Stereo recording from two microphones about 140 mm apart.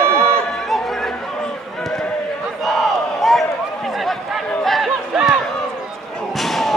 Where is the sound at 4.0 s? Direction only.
Centre (ahead or behind).